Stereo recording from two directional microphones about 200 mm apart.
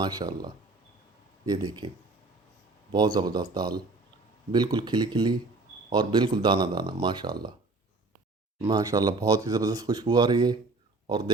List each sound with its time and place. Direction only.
0.0 s speech: 20° right (ahead or behind)
3.2 s speech: 20° right (ahead or behind)
8.6 s speech: 20° right (ahead or behind)
11.0 s a sound: 20° right (ahead or behind)